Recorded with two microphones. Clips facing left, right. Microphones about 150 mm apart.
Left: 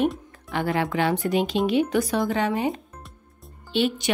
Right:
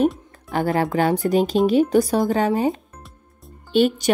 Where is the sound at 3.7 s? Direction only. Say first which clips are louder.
Right 6 dB; 45° right (ahead or behind).